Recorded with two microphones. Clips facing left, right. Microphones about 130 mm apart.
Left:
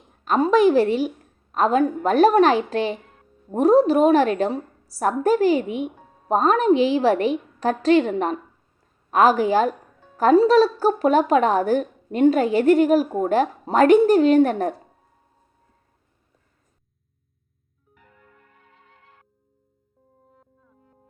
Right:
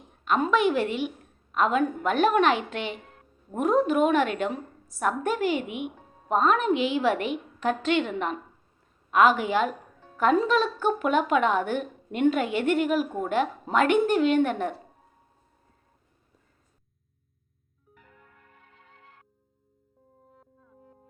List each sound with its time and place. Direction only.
0.3 s a woman's voice: 35° left (ahead or behind)